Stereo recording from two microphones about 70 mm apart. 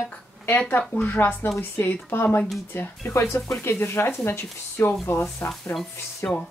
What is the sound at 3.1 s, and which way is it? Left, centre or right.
Speech, left.